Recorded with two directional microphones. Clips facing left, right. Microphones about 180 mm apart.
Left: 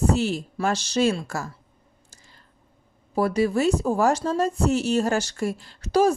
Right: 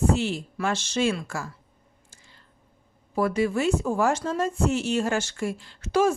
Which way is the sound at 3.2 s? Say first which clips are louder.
Left 2 dB; 35° left (ahead or behind).